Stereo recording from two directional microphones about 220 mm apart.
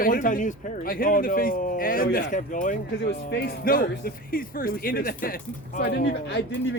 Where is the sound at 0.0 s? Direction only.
35° left (ahead or behind).